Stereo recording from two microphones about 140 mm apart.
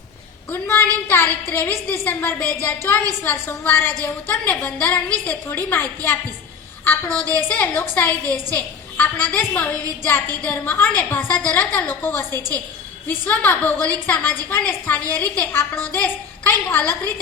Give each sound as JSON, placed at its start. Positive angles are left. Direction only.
{"t": 0.5, "sound": "a woman's voice", "side_deg": 15}